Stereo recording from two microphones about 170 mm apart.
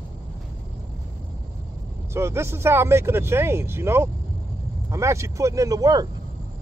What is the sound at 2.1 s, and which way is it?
Speech, 15° right (ahead or behind).